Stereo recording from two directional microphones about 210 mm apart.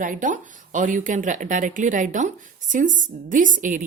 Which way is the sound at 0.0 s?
40° right (ahead or behind).